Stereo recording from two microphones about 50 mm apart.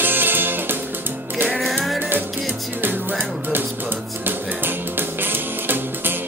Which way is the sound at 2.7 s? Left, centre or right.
Right.